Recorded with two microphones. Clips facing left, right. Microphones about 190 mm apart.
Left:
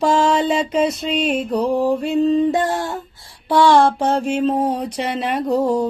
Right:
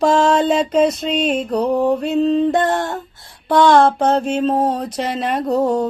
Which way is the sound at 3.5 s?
50° right (ahead or behind).